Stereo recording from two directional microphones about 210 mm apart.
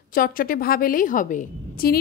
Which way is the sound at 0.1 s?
40° left (ahead or behind).